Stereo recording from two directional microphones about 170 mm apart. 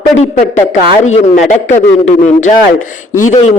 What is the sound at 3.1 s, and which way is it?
Speech, 45° left (ahead or behind).